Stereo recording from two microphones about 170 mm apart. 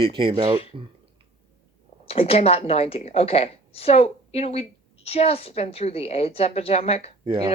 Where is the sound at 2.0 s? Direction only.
35° left (ahead or behind).